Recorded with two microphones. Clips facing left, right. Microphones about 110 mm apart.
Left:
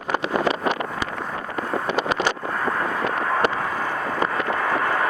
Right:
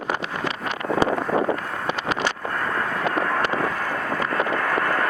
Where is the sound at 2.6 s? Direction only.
5° left (ahead or behind).